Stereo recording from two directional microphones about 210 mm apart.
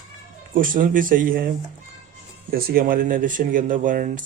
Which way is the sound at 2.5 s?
45° right (ahead or behind).